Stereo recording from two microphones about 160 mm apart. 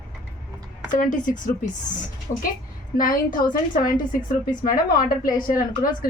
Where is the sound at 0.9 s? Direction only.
55° left (ahead or behind).